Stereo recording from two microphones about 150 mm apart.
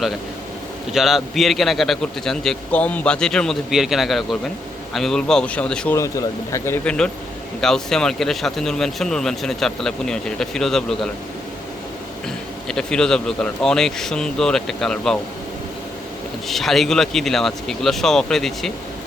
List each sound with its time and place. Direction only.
0.9 s speech: centre (ahead or behind)
6.0 s speech: 20° left (ahead or behind)
6.8 s speech: 5° left (ahead or behind)
12.6 s speech: 5° left (ahead or behind)
16.5 s speech: centre (ahead or behind)